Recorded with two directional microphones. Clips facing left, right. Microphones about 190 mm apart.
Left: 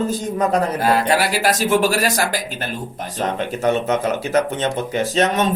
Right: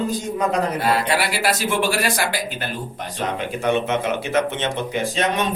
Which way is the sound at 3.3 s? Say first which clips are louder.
Left 2 dB; 40° left (ahead or behind).